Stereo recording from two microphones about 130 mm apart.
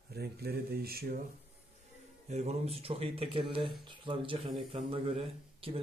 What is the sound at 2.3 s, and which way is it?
Speech, 55° right (ahead or behind).